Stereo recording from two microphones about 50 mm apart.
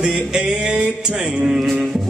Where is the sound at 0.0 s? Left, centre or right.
Centre.